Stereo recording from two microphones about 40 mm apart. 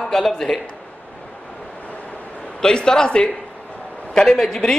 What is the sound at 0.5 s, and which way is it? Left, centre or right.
Speech, centre.